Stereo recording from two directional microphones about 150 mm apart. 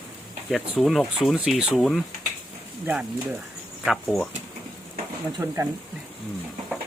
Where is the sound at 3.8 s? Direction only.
Centre (ahead or behind).